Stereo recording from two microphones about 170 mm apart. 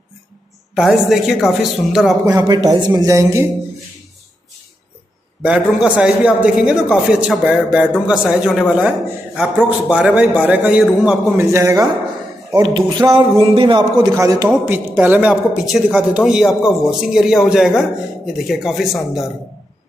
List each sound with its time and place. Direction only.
0.7 s a man's voice: 5° right (ahead or behind)
2.2 s speech: 20° right (ahead or behind)
5.4 s a man's voice: 5° right (ahead or behind)
11.4 s a man's voice: 15° right (ahead or behind)
12.5 s a man's voice: 25° right (ahead or behind); by 19.3 s centre (ahead or behind)